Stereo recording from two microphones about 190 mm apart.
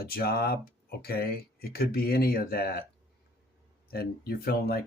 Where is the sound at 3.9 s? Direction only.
55° left (ahead or behind).